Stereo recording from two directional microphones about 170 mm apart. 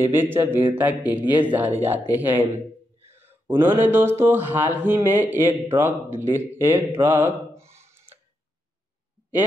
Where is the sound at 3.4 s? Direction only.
10° right (ahead or behind).